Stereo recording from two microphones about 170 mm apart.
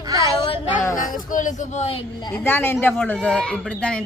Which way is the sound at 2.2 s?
15° left (ahead or behind).